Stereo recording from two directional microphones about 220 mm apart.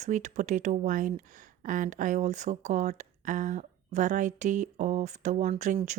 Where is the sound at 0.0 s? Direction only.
35° right (ahead or behind).